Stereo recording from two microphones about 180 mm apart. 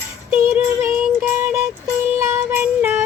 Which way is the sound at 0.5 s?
15° right (ahead or behind).